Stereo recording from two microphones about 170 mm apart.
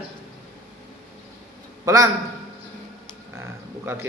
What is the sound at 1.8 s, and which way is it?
Speech, 20° right (ahead or behind).